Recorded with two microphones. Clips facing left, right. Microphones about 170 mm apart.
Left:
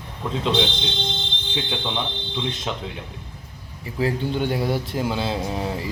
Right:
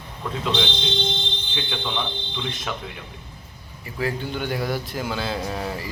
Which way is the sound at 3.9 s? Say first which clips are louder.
Left 4 dB; 25° left (ahead or behind).